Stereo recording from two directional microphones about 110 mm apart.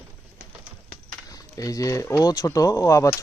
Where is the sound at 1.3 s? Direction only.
30° left (ahead or behind).